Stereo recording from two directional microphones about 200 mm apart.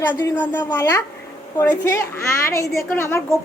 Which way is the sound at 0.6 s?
20° left (ahead or behind).